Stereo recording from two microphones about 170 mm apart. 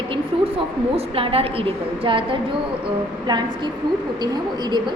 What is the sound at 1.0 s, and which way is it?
A woman's voice, 35° right (ahead or behind).